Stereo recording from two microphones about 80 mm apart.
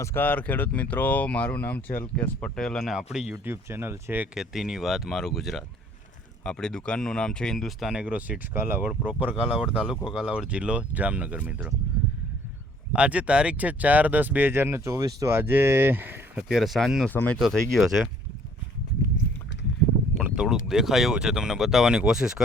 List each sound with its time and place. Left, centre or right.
0.0 s speech: left
2.6 s speech: centre
2.9 s speech: centre
3.3 s speech: right
4.4 s speech: centre
8.5 s speech: right
12.9 s speech: centre; by 15.3 s right
15.3 s speech: right
16.4 s speech: centre
17.1 s speech: centre
17.3 s speech: centre
20.2 s speech: centre